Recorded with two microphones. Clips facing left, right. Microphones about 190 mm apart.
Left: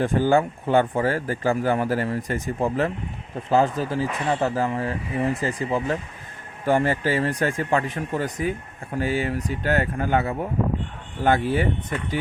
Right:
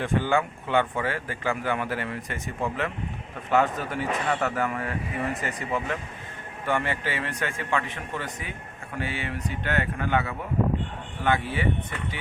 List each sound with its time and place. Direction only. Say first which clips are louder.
0.0 s speech: left 5 dB; 35° left (ahead or behind)